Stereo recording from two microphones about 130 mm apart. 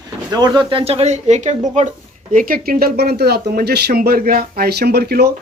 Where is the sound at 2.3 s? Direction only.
90° right.